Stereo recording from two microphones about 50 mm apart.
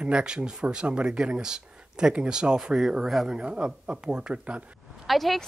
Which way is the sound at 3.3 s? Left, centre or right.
Right.